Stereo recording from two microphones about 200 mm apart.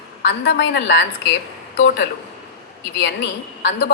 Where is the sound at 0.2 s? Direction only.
55° left (ahead or behind).